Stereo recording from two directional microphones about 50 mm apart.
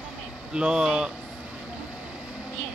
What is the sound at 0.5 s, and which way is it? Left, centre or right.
Speech, centre.